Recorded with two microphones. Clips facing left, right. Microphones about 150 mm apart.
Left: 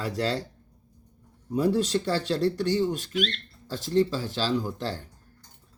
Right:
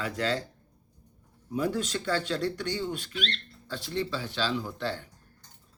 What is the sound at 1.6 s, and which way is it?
Speech, 35° left (ahead or behind).